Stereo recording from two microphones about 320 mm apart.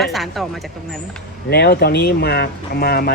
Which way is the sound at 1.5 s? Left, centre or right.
Left.